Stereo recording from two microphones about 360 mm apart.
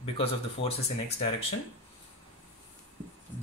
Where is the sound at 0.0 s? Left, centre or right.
Centre.